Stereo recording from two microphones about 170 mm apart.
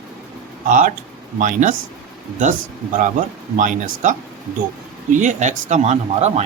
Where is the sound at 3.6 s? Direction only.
50° right (ahead or behind).